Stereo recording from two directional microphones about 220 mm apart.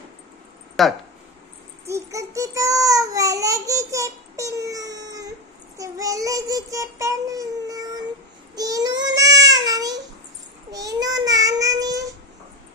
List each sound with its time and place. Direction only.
0.8 s speech: centre (ahead or behind)
1.9 s a child's voice: 15° right (ahead or behind)
5.7 s child singing: 15° right (ahead or behind)
9.6 s babbling: 15° right (ahead or behind)
10.7 s child singing: 15° right (ahead or behind)